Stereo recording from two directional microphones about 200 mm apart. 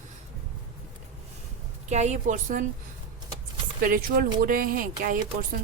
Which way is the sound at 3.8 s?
45° right (ahead or behind).